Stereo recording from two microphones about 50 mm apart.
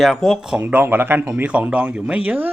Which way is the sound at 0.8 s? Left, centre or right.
Right.